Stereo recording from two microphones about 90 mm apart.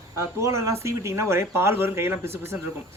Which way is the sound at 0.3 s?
35° right (ahead or behind).